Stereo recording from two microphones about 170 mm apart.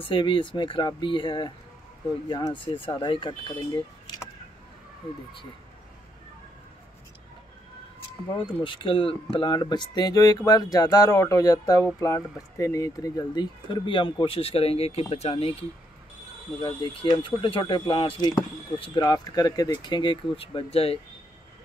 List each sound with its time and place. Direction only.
0.0 s speech: 30° left (ahead or behind)
8.5 s speech: 30° left (ahead or behind)
16.6 s speech: 30° left (ahead or behind)